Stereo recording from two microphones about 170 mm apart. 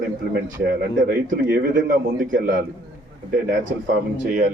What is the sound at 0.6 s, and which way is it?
A man's voice, 55° right (ahead or behind).